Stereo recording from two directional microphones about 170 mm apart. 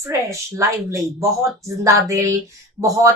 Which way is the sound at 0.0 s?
15° right (ahead or behind).